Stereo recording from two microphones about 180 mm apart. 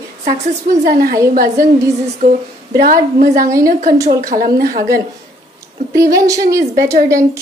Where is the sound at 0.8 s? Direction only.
55° right (ahead or behind).